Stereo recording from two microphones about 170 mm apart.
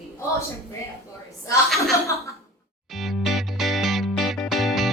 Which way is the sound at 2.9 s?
Centre (ahead or behind).